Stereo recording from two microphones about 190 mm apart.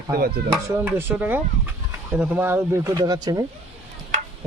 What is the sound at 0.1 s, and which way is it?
Speech, 55° right (ahead or behind).